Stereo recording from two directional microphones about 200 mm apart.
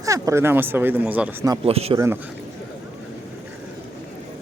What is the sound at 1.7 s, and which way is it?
Speech, 30° right (ahead or behind).